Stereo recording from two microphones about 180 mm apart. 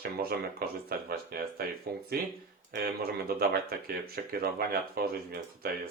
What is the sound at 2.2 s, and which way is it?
Speech, 55° right (ahead or behind).